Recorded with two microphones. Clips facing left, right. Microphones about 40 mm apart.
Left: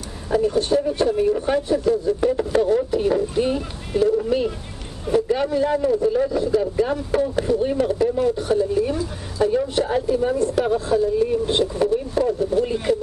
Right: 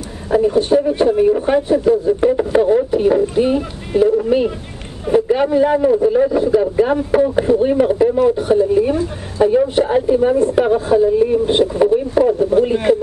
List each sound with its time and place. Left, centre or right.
0.3 s a man's voice: centre